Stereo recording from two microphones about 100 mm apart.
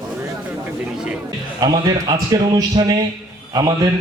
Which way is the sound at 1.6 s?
40° right (ahead or behind).